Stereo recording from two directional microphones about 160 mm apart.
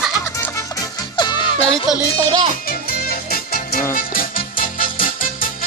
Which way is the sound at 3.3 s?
65° left (ahead or behind).